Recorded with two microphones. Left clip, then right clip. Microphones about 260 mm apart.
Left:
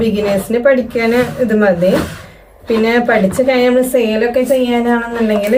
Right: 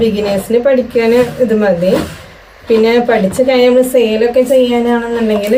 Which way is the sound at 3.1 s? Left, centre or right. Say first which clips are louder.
Right 1 dB; centre.